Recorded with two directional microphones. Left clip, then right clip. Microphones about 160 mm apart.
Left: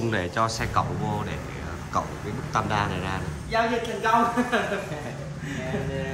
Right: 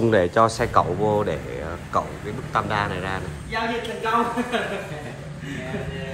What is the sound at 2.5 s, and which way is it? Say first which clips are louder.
Speech: right 2 dB; 25° left (ahead or behind).